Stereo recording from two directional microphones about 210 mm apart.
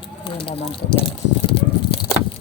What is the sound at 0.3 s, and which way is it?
Speech, 25° left (ahead or behind).